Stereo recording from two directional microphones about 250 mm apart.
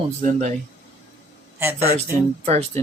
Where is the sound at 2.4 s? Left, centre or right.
Right.